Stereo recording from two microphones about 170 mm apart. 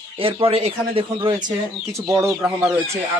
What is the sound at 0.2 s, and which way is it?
A man's voice, 35° right (ahead or behind).